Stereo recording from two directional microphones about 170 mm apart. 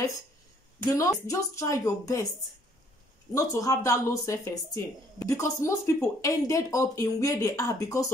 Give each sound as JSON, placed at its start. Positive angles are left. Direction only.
{"t": 0.8, "sound": "a woman's voice", "side_deg": 20}
{"t": 3.3, "sound": "a woman's voice", "side_deg": 20}